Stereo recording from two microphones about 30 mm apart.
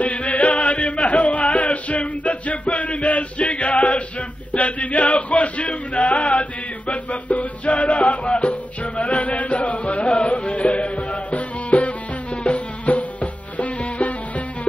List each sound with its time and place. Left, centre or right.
0.0 s music: left
4.5 s male singing: left
7.1 s music: left
10.0 s music: left
10.3 s music: left